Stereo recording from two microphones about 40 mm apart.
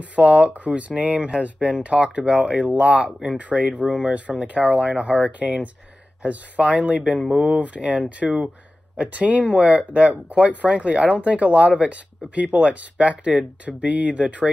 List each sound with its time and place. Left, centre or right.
0.1 s speech: right